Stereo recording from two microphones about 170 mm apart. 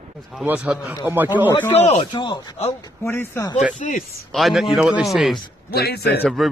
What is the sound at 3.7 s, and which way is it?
Speech, 50° left (ahead or behind).